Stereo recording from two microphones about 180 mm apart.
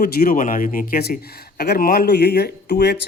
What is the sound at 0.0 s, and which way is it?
A man's voice, 55° left (ahead or behind).